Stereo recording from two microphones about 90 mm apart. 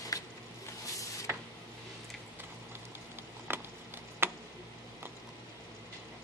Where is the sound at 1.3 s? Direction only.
30° right (ahead or behind).